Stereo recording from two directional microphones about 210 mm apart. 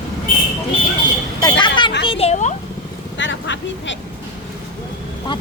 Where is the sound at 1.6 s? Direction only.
20° left (ahead or behind).